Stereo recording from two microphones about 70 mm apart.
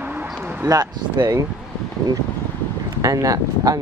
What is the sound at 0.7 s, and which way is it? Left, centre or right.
Speech, right.